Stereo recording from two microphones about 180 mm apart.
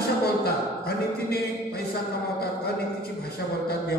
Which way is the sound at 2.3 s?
60° left (ahead or behind).